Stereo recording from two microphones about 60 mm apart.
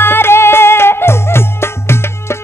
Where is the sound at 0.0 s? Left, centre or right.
Left.